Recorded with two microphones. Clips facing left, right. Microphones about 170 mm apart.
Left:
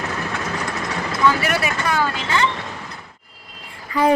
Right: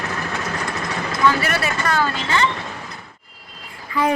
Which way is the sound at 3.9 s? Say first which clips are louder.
Left 2 dB; 35° left (ahead or behind).